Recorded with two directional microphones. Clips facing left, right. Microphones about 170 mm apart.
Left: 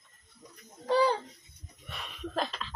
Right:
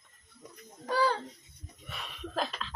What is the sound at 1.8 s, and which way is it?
Speech, centre (ahead or behind).